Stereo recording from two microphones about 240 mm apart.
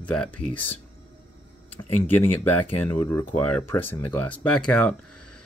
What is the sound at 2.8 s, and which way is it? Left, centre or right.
Speech, centre.